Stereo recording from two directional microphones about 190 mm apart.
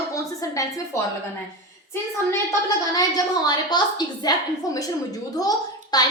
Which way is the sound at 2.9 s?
20° left (ahead or behind).